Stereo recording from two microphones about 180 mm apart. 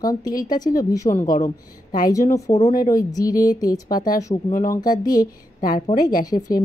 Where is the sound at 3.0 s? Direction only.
20° left (ahead or behind).